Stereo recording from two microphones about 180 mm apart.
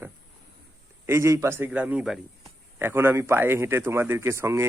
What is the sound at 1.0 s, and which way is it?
Speech, 15° right (ahead or behind).